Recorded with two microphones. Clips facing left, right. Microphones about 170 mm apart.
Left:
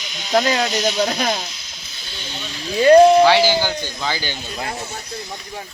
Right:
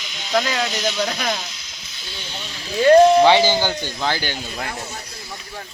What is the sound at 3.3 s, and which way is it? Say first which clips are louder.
Speech: even; 20° right (ahead or behind).